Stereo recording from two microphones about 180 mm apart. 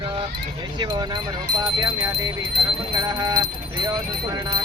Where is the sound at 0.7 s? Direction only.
25° right (ahead or behind).